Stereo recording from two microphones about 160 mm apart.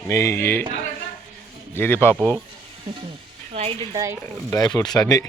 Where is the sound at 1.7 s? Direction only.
15° left (ahead or behind).